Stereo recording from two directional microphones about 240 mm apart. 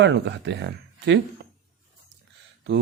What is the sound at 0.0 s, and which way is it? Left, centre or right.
Speech, right.